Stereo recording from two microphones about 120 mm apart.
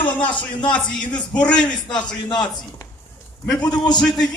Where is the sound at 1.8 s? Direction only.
40° left (ahead or behind).